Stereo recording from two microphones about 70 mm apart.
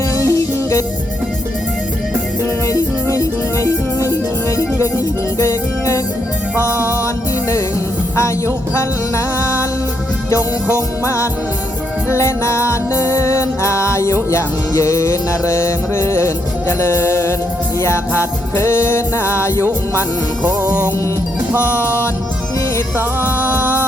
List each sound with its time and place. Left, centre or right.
0.2 s music: left
2.6 s music: left
8.1 s music: left
10.8 s music: left
20.6 s music: right
21.6 s music: left